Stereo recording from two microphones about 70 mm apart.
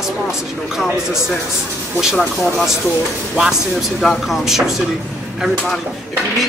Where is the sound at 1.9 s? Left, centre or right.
Centre.